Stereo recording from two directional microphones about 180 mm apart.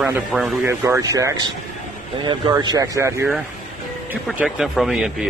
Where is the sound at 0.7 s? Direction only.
15° right (ahead or behind).